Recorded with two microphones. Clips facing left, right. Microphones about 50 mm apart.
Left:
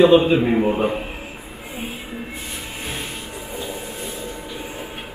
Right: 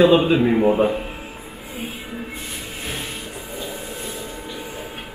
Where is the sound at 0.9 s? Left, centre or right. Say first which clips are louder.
Right 1 dB; centre.